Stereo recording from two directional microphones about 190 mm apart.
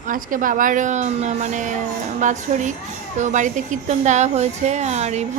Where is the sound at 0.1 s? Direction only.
45° right (ahead or behind).